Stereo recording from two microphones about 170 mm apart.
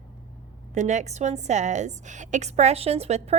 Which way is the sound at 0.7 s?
45° right (ahead or behind).